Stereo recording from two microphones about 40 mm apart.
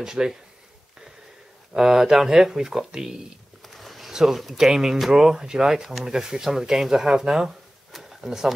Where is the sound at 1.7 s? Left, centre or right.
Centre.